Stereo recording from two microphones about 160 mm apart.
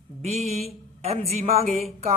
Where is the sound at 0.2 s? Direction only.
40° right (ahead or behind).